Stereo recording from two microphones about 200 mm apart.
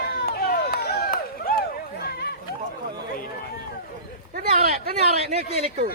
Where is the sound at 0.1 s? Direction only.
50° left (ahead or behind).